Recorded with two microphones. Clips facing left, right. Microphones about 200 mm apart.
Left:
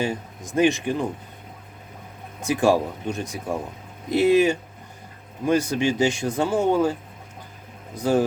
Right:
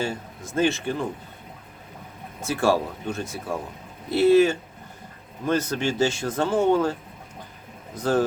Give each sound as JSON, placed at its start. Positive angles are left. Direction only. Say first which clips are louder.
{"t": 0.0, "sound": "speech", "louder": "left 2 dB", "side_deg": 15}
{"t": 2.4, "sound": "speech", "louder": "left 3 dB", "side_deg": 15}
{"t": 7.9, "sound": "speech", "louder": "left 2 dB", "side_deg": 10}